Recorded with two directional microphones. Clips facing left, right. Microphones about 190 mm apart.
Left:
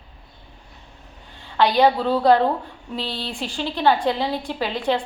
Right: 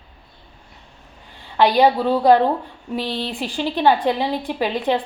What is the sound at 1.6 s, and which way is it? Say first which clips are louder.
A woman's voice: right 2 dB; 15° right (ahead or behind).